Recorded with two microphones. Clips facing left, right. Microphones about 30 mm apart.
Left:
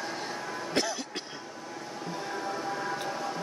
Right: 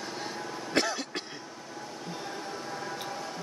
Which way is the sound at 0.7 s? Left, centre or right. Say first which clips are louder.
Right 3 dB; centre.